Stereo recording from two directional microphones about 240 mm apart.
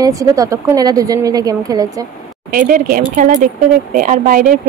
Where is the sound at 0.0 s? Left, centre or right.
Centre.